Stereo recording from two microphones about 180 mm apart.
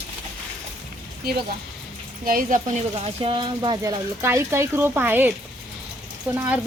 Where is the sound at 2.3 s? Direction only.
50° right (ahead or behind); by 6.4 s 10° right (ahead or behind).